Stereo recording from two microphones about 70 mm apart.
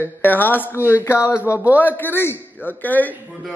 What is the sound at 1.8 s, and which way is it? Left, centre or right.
Speech, left.